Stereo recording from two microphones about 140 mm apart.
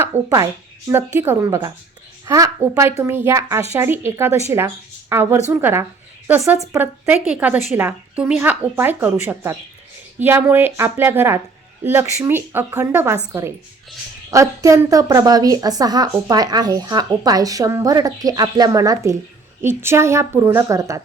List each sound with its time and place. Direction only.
0.0 s a woman's voice: 15° right (ahead or behind)
14.3 s a woman's voice: 25° right (ahead or behind)